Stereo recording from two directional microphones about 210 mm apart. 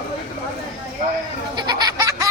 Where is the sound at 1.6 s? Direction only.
20° right (ahead or behind).